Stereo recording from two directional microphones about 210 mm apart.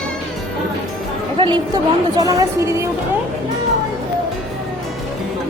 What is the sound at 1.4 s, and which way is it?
A woman's voice, 20° right (ahead or behind).